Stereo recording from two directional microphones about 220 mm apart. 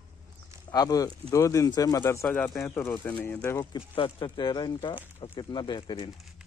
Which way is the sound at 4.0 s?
20° left (ahead or behind).